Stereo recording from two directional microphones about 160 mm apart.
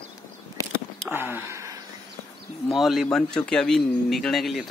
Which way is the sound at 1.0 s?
10° right (ahead or behind).